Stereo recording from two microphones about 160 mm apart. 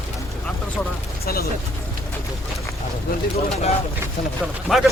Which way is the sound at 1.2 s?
70° left (ahead or behind).